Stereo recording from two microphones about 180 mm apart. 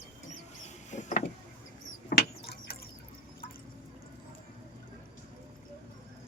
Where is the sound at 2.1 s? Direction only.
60° left (ahead or behind).